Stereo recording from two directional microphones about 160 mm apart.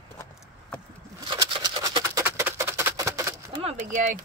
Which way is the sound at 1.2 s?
30° right (ahead or behind).